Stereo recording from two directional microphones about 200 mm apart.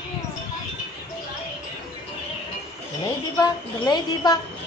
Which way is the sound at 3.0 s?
20° left (ahead or behind).